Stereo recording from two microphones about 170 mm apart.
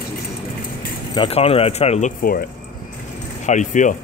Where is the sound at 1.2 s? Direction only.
35° left (ahead or behind).